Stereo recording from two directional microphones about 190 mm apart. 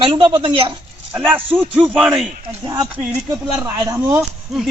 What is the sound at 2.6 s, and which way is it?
A man's voice, 15° right (ahead or behind).